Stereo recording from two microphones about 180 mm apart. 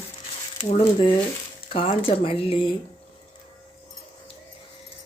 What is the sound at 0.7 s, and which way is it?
Speech, 30° left (ahead or behind).